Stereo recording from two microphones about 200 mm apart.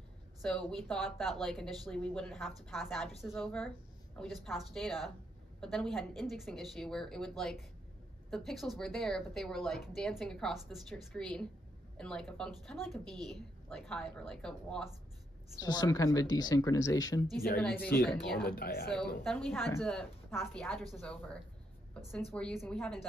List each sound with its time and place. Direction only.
0.4 s speech: 5° left (ahead or behind)
15.6 s speech: 20° left (ahead or behind); by 18.5 s 5° left (ahead or behind)
18.5 s speech: 50° left (ahead or behind)
19.2 s speech: centre (ahead or behind)